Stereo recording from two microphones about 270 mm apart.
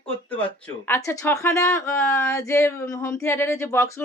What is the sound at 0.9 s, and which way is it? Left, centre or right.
Speech, centre.